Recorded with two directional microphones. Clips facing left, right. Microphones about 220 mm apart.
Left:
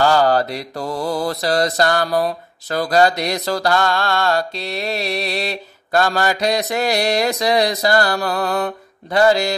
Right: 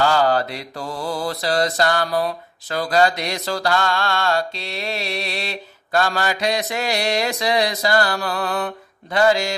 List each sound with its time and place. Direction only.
0.0 s mantra: 40° left (ahead or behind)